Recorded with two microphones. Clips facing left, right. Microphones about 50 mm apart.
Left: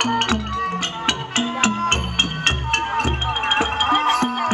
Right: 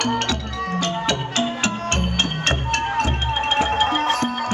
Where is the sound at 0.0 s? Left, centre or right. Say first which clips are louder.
Left 2 dB; left.